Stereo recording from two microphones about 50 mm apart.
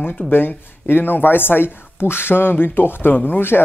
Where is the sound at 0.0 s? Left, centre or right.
Left.